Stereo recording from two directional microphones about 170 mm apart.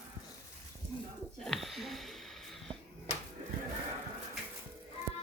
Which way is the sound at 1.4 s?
Centre (ahead or behind).